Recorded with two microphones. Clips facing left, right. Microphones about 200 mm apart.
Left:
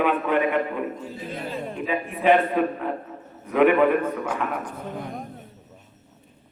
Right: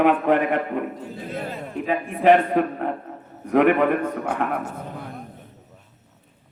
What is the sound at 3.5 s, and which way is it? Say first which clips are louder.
A man's voice: even; 70° right (ahead or behind).